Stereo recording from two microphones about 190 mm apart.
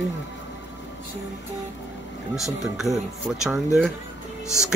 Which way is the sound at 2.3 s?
Centre (ahead or behind).